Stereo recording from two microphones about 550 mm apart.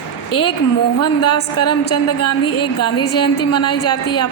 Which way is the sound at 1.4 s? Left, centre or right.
Left.